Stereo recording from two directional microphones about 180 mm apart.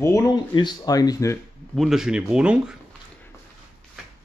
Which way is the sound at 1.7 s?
Centre (ahead or behind).